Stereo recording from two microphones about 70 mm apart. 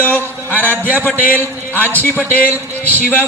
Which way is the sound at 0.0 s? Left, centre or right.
Left.